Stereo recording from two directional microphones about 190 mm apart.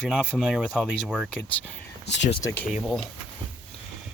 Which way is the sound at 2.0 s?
70° left (ahead or behind).